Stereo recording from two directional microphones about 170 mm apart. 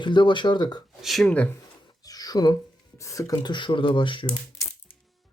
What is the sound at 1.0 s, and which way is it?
Speech, centre (ahead or behind).